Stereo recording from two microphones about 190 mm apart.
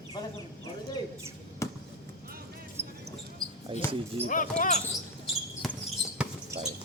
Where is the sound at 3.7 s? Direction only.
25° right (ahead or behind).